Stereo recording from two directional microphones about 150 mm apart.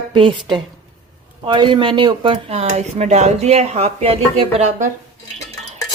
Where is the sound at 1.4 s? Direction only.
30° right (ahead or behind).